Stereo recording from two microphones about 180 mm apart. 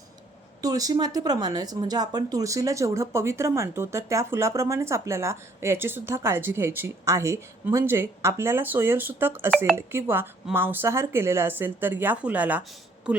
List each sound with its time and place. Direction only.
0.6 s speech: 20° right (ahead or behind)